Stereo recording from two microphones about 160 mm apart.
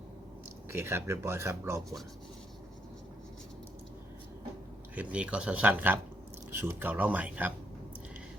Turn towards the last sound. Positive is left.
turn(degrees=-10)  # may be behind; listen again after turning